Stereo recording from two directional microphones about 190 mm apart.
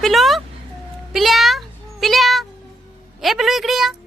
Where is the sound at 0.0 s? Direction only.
Centre (ahead or behind).